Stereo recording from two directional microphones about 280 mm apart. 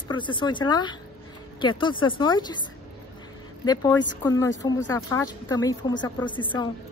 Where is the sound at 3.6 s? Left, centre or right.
Centre.